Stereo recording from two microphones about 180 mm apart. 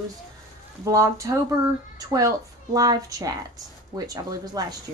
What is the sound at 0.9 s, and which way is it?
Speech, 15° right (ahead or behind).